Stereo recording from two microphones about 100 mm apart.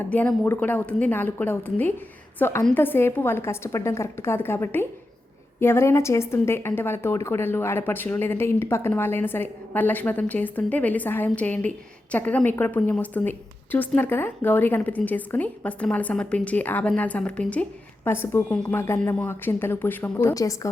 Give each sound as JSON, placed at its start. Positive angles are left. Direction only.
{"t": 0.0, "sound": "a woman's voice", "side_deg": 15}
{"t": 20.3, "sound": "a woman's voice", "side_deg": 35}